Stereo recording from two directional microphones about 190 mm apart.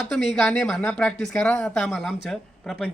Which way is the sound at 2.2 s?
Centre (ahead or behind).